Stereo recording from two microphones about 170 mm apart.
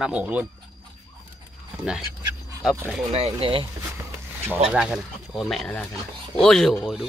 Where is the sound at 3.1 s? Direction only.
35° right (ahead or behind).